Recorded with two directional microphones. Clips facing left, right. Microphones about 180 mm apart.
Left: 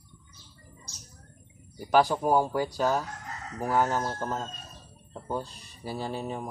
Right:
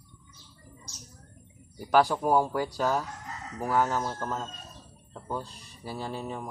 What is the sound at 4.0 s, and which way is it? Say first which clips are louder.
Speech: left 1 dB; 10° left (ahead or behind).